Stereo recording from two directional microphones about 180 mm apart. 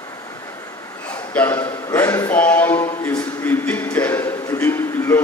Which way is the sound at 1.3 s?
10° left (ahead or behind).